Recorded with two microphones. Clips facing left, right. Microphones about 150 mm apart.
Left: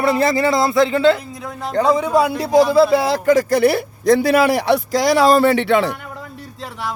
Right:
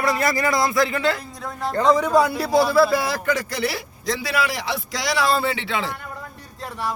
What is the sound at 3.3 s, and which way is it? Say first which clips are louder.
A man's voice: left 14 dB; 50° left (ahead or behind).